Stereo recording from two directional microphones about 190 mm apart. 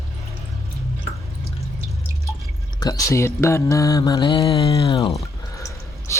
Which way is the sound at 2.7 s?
20° left (ahead or behind).